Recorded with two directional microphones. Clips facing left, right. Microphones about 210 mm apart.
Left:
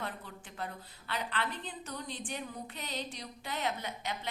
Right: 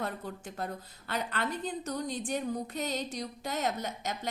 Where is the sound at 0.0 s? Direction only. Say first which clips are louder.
Right 6 dB; 45° right (ahead or behind).